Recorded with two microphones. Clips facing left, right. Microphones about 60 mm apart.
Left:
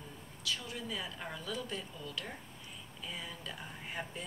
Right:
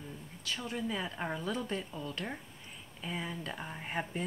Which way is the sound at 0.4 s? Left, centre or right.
Right.